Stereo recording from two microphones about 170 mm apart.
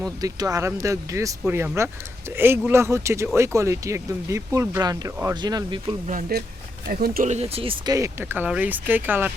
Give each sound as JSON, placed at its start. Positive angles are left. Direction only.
{"t": 0.2, "sound": "speech", "side_deg": -20}
{"t": 6.1, "sound": "speech", "side_deg": -55}
{"t": 7.3, "sound": "speech", "side_deg": -35}
{"t": 7.9, "sound": "speech", "side_deg": -15}